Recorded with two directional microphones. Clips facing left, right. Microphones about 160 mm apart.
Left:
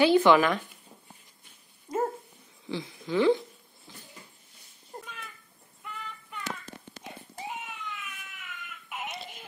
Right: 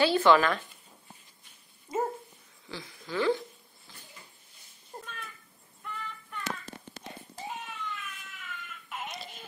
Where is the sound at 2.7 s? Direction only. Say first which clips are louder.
Left 7 dB; 20° left (ahead or behind).